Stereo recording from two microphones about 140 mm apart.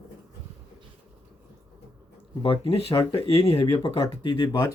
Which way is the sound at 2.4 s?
40° left (ahead or behind).